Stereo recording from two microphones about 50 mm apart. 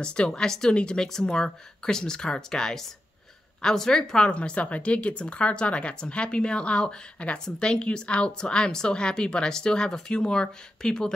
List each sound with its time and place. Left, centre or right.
0.0 s speech: centre